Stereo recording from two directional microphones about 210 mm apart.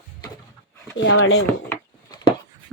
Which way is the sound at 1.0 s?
65° left (ahead or behind).